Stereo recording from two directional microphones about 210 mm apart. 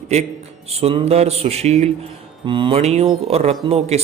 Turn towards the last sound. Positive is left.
turn(degrees=-30)  # may be behind; listen again after turning